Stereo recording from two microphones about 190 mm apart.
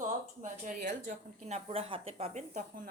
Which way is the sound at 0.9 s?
40° right (ahead or behind).